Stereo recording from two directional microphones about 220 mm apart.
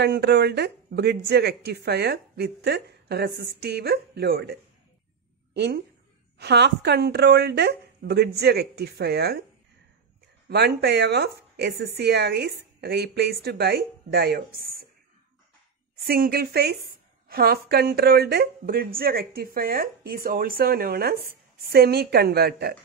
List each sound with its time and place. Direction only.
0.0 s a woman's voice: 50° right (ahead or behind)
10.5 s a woman's voice: 50° right (ahead or behind)
16.1 s a woman's voice: 45° right (ahead or behind)